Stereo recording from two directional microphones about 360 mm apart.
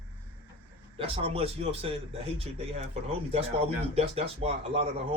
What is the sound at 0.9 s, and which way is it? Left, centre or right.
A man's voice, centre.